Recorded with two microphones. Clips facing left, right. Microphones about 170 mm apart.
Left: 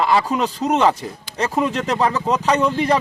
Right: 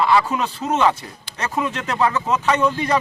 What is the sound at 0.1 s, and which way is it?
Speech, 35° left (ahead or behind).